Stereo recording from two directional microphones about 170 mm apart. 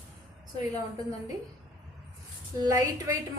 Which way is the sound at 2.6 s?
20° right (ahead or behind).